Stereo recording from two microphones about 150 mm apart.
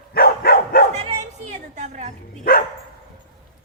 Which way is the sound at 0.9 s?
45° right (ahead or behind).